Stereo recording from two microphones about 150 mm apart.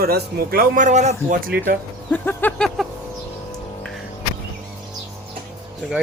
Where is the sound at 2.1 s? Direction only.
10° left (ahead or behind).